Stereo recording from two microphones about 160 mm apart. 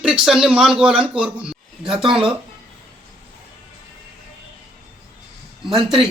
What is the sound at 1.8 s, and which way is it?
Speech, 35° right (ahead or behind).